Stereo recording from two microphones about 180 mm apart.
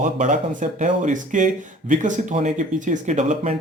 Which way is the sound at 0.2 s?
45° right (ahead or behind).